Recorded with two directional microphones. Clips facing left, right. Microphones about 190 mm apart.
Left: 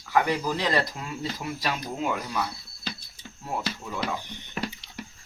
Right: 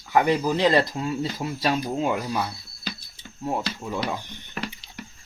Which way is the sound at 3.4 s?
25° right (ahead or behind).